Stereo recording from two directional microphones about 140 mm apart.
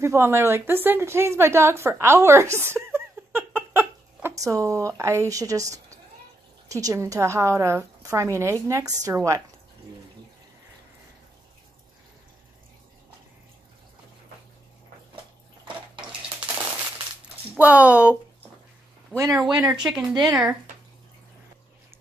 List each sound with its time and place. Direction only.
0.0 s a woman's voice: 20° right (ahead or behind)
17.6 s speech: 10° right (ahead or behind)
19.1 s a woman's voice: 20° right (ahead or behind)
19.6 s speech: 5° right (ahead or behind)